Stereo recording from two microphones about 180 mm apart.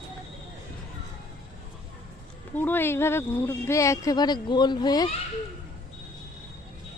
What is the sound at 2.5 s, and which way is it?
Speech, 10° left (ahead or behind).